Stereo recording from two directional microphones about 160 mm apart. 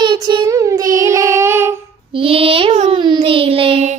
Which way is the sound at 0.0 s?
25° right (ahead or behind).